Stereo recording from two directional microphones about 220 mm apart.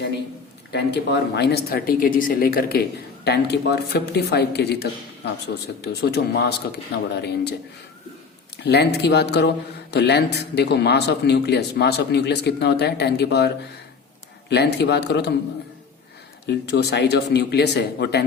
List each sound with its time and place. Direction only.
0.7 s a man's voice: 50° left (ahead or behind)
8.6 s a man's voice: 50° left (ahead or behind)
14.5 s a man's voice: 50° left (ahead or behind)
16.5 s a man's voice: 50° left (ahead or behind)